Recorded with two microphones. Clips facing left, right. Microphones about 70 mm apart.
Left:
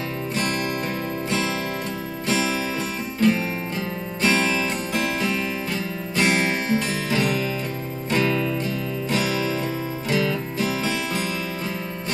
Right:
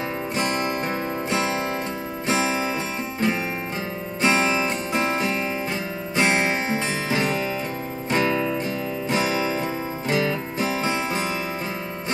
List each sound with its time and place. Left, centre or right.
0.4 s music: right
2.2 s music: right